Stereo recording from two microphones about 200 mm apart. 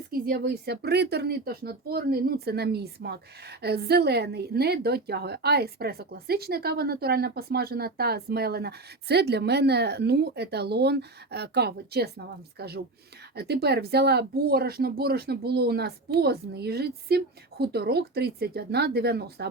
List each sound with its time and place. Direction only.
0.1 s a woman's voice: 50° right (ahead or behind)